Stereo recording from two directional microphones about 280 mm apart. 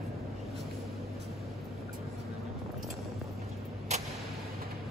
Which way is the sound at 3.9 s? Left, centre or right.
Right.